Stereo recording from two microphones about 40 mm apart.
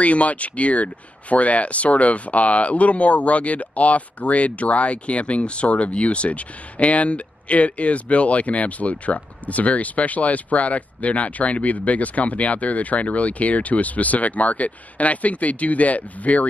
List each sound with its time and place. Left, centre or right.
0.0 s speech: left